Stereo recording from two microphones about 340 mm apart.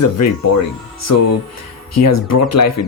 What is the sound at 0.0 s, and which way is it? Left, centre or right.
Speech, left.